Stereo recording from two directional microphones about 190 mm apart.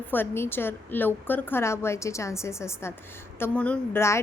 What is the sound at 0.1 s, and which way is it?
A woman's voice, 10° left (ahead or behind).